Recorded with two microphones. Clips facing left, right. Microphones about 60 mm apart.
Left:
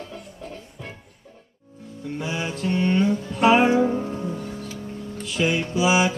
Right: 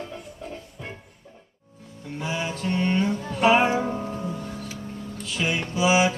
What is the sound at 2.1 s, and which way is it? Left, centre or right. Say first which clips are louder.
Music: even; centre.